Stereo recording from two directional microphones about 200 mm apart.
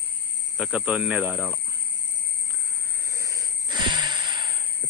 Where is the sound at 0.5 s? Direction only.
5° right (ahead or behind).